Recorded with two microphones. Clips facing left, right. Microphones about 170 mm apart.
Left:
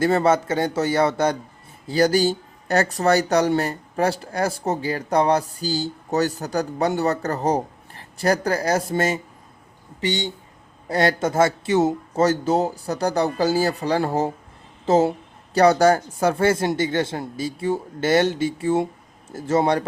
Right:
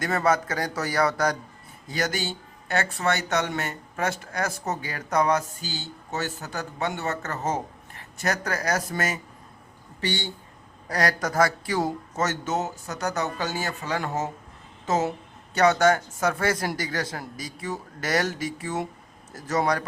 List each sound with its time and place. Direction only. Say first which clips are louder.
0.0 s speech: left 6 dB; 30° left (ahead or behind)